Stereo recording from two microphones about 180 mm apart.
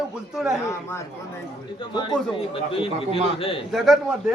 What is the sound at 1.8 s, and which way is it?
A man's voice, 25° left (ahead or behind).